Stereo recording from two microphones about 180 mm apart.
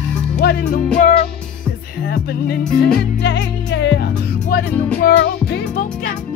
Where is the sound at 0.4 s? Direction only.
65° left (ahead or behind).